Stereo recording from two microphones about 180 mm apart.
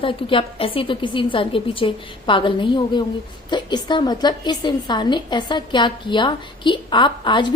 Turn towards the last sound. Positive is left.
turn(degrees=25)  # may be behind; listen again after turning